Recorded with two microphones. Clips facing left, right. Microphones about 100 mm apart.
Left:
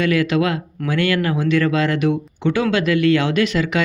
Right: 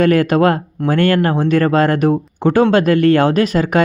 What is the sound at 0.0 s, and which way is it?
Speech, 45° right (ahead or behind).